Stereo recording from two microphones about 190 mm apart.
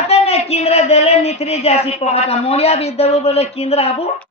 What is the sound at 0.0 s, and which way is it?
A man's voice, 35° left (ahead or behind).